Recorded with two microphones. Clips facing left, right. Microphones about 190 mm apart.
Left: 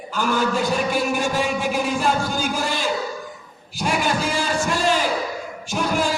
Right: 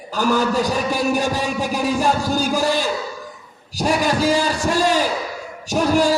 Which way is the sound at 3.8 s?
40° right (ahead or behind).